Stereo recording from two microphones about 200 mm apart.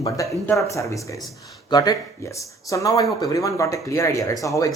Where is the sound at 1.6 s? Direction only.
20° left (ahead or behind).